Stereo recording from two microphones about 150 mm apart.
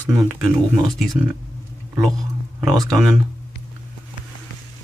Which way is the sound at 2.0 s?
Centre (ahead or behind).